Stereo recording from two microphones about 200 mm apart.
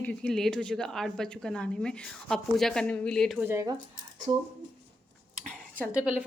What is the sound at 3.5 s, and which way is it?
Speech, 15° right (ahead or behind).